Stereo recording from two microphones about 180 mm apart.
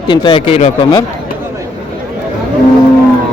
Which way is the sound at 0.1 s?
25° left (ahead or behind).